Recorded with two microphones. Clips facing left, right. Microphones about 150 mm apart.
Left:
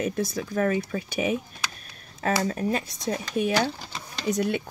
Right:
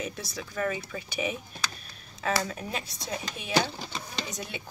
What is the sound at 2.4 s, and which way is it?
Speech, 45° left (ahead or behind).